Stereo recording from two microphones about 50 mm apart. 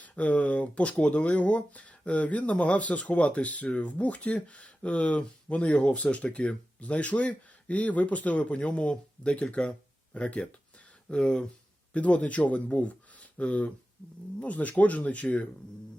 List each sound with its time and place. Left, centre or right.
0.0 s speech: left